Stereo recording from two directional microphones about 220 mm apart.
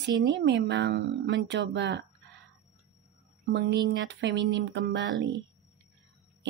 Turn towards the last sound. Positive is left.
turn(degrees=-55)  # may be behind; listen again after turning